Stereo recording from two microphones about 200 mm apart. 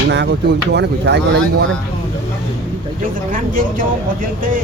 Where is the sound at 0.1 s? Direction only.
60° right (ahead or behind).